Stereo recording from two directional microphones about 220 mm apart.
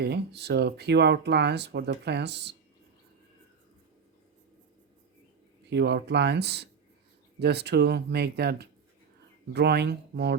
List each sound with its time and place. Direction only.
0.0 s speech: 50° right (ahead or behind)
5.6 s speech: 50° right (ahead or behind)